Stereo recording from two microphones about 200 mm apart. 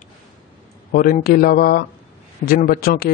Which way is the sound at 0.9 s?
45° left (ahead or behind).